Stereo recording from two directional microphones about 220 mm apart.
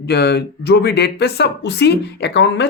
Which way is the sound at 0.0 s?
50° left (ahead or behind).